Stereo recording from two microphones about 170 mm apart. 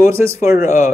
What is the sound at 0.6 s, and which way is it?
Speech, 50° left (ahead or behind).